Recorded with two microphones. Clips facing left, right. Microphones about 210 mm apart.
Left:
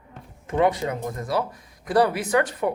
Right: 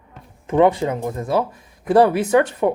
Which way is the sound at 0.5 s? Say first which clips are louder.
Right 6 dB; 25° right (ahead or behind).